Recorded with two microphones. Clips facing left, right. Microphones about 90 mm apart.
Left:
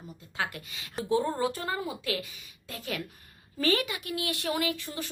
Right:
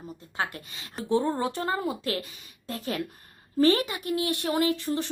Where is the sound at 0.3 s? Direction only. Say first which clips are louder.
Right 2 dB; 35° right (ahead or behind).